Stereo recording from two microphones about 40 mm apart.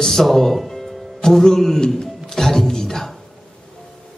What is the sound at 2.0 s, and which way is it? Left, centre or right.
Music, centre.